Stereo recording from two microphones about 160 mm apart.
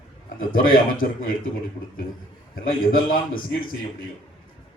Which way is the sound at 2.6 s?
60° left (ahead or behind).